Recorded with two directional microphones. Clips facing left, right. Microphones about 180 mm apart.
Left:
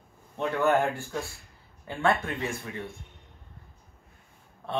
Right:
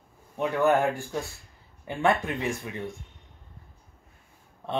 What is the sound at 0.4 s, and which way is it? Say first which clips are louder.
Speech: right 2 dB; 15° right (ahead or behind).